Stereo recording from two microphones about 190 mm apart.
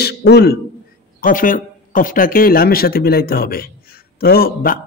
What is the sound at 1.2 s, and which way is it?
A man's voice, 45° left (ahead or behind).